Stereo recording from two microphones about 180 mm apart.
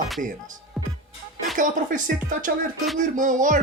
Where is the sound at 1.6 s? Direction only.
45° right (ahead or behind).